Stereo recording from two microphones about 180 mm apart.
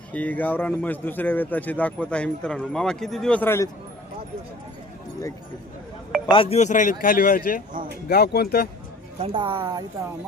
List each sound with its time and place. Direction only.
0.1 s speech: 10° left (ahead or behind)
6.3 s speech: 35° left (ahead or behind); by 7.6 s 50° left (ahead or behind)
8.1 s speech: 65° left (ahead or behind)
9.1 s speech: 30° right (ahead or behind)